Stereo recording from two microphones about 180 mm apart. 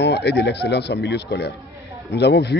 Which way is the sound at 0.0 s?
70° left (ahead or behind).